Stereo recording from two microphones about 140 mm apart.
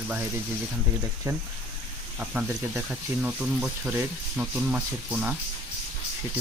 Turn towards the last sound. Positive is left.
turn(degrees=-5)  # may be behind; listen again after turning